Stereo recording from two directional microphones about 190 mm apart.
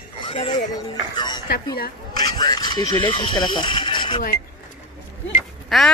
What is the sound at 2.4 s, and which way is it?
Speech, 20° left (ahead or behind).